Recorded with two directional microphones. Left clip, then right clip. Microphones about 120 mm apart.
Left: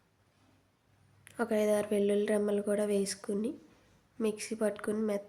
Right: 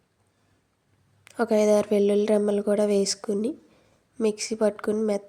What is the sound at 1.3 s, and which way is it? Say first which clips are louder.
A woman's voice: right 9 dB; 45° right (ahead or behind).